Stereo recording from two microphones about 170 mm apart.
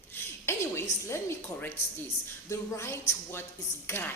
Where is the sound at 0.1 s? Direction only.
15° left (ahead or behind).